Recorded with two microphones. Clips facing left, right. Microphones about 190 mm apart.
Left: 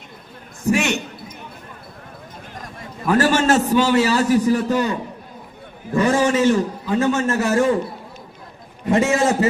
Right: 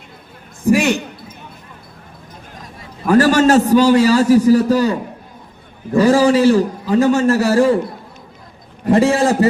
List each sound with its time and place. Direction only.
0.7 s a man's voice: 35° right (ahead or behind)
3.1 s a man's voice: 40° right (ahead or behind)
6.0 s a man's voice: 35° right (ahead or behind)
8.9 s a man's voice: 35° right (ahead or behind)